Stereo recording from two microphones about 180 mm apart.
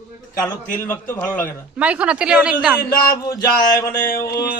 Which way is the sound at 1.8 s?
5° right (ahead or behind).